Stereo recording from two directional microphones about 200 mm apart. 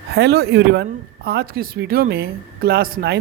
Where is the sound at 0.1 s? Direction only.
55° right (ahead or behind).